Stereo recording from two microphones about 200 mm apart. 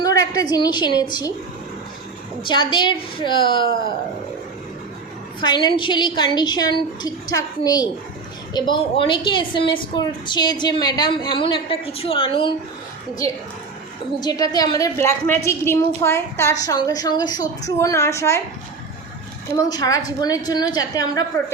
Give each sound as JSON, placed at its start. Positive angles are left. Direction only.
{"t": 0.0, "sound": "a sound", "side_deg": 20}
{"t": 0.5, "sound": "a woman's voice", "side_deg": 20}
{"t": 2.4, "sound": "a woman's voice", "side_deg": 25}
{"t": 5.4, "sound": "a woman's voice", "side_deg": 20}
{"t": 14.2, "sound": "a woman's voice", "side_deg": 20}
{"t": 19.5, "sound": "a woman's voice", "side_deg": 20}